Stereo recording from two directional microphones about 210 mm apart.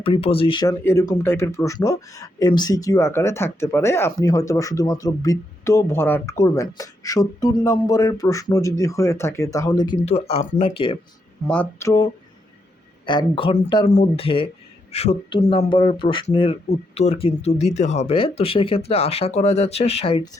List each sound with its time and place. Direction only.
0.0 s speech: 25° left (ahead or behind)
11.4 s speech: 5° left (ahead or behind); by 20.3 s 25° left (ahead or behind)